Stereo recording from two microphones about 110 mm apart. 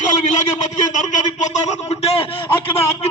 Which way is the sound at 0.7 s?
90° left.